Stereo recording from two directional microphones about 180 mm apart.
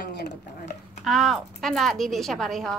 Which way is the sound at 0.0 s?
65° left (ahead or behind).